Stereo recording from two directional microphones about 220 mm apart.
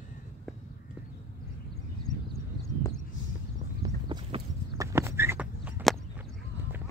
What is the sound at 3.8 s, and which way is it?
Horse, 15° right (ahead or behind).